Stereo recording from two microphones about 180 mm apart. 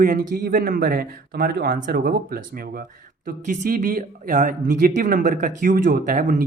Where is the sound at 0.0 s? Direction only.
50° right (ahead or behind).